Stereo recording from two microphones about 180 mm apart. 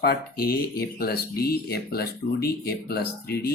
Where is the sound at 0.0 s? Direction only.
60° left (ahead or behind).